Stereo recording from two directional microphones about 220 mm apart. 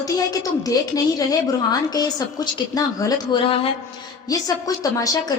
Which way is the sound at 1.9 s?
15° left (ahead or behind).